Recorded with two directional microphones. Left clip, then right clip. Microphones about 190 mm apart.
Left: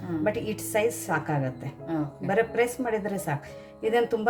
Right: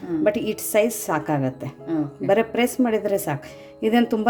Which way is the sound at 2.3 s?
45° right (ahead or behind).